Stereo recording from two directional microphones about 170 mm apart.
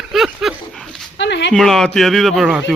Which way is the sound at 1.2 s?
90° left.